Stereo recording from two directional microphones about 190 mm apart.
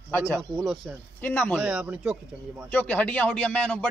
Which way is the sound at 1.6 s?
5° right (ahead or behind).